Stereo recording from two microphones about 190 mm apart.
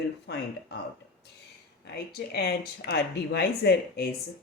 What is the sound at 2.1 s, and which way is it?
Speech, 55° left (ahead or behind).